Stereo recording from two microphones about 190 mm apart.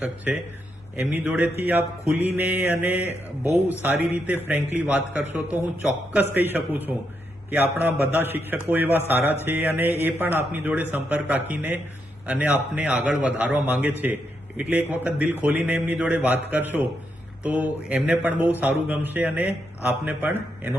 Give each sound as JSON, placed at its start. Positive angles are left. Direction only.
{"t": 0.9, "sound": "a man's voice", "side_deg": -10}